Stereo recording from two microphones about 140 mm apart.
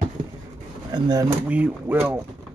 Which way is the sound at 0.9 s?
30° right (ahead or behind).